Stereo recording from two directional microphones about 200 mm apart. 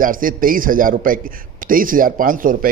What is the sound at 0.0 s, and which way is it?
Speech, 45° right (ahead or behind).